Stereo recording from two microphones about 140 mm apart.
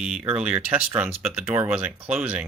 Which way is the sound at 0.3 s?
10° right (ahead or behind).